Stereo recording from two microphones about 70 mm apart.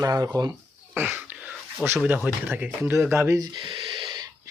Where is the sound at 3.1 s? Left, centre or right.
Right.